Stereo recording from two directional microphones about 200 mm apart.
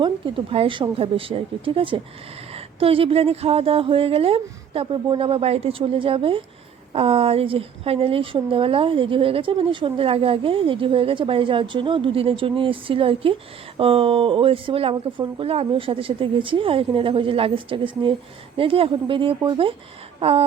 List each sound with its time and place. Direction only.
0.0 s a woman's voice: 25° right (ahead or behind)